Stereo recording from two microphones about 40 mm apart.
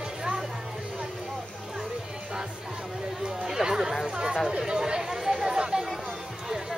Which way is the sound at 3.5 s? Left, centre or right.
Centre.